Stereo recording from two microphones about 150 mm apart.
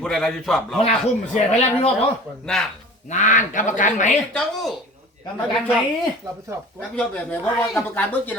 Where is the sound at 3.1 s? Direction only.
55° left (ahead or behind).